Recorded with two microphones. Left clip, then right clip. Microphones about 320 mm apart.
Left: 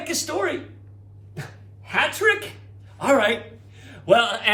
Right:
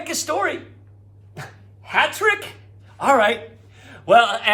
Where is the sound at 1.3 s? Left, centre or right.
Centre.